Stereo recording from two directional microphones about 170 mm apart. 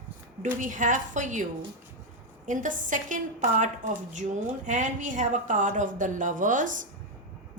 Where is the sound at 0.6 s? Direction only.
50° right (ahead or behind).